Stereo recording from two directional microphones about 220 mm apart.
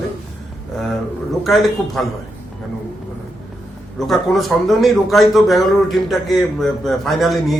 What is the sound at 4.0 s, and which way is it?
A man's voice, centre (ahead or behind).